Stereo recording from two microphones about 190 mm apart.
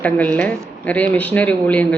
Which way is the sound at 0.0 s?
10° left (ahead or behind).